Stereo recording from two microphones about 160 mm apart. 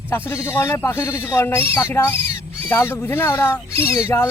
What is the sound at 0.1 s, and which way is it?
Speech, 15° left (ahead or behind).